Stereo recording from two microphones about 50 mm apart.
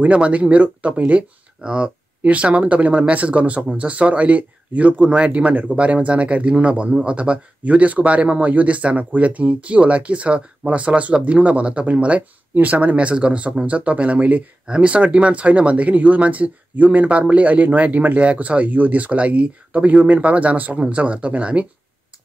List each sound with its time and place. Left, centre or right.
0.0 s speech: right